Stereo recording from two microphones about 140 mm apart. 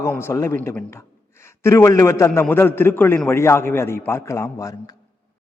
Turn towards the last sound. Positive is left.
turn(degrees=25)  # may be behind; listen again after turning